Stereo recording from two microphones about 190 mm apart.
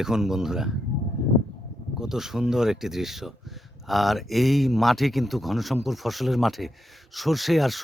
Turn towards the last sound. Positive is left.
turn(degrees=0)  # may be behind; listen again after turning